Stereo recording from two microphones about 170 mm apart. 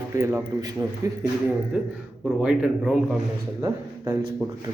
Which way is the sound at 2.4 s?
5° right (ahead or behind).